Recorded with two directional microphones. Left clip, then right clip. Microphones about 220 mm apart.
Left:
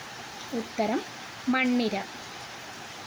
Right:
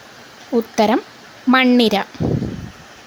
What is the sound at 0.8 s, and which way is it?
A woman's voice, 50° right (ahead or behind).